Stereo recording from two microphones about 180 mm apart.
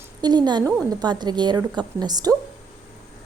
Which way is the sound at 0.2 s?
25° right (ahead or behind).